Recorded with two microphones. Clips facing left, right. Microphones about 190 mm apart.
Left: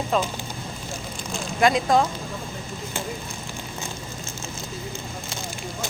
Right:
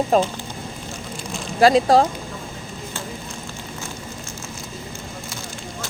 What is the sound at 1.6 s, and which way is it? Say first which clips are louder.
Speech: right 5 dB; 35° right (ahead or behind).